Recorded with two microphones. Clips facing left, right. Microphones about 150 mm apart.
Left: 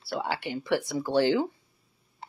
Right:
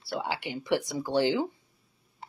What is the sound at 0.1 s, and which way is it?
Speech, 15° right (ahead or behind).